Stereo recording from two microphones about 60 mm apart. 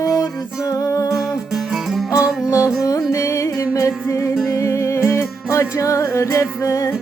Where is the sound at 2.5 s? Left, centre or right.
Left.